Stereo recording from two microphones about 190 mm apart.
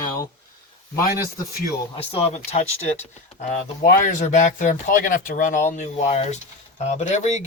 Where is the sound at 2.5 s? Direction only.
35° left (ahead or behind).